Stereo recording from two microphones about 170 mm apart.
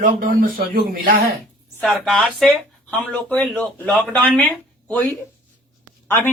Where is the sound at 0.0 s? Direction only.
55° right (ahead or behind).